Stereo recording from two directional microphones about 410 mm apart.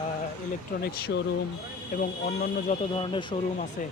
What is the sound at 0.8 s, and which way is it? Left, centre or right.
Speech, left.